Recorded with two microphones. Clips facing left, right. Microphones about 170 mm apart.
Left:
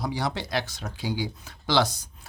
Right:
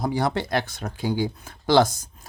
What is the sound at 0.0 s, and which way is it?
Speech, 50° right (ahead or behind).